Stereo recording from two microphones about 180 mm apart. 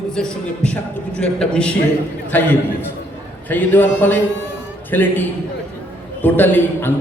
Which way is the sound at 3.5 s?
10° left (ahead or behind).